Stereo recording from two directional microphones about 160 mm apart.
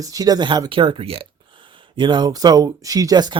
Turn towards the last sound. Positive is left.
turn(degrees=-25)  # may be behind; listen again after turning